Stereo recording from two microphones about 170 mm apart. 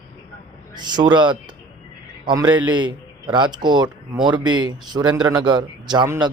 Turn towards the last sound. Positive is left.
turn(degrees=-20)  # may be behind; listen again after turning